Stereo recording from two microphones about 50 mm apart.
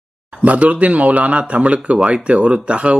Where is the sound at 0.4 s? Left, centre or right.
Right.